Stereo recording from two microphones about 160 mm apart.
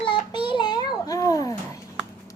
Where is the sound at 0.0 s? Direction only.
30° left (ahead or behind).